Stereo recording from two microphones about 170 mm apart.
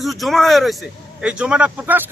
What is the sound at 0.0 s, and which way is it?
A man's voice, centre (ahead or behind).